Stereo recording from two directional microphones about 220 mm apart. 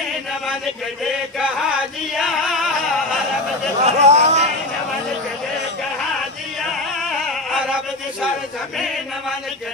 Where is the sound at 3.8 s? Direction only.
30° right (ahead or behind).